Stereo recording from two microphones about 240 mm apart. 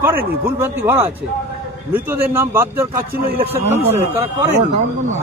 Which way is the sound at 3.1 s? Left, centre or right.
Right.